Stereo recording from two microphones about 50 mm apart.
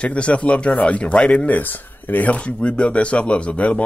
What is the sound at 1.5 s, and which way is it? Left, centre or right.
A man's voice, left.